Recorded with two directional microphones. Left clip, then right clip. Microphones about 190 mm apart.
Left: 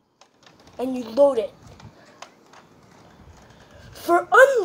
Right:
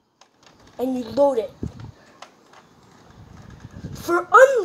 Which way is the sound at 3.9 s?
10° right (ahead or behind).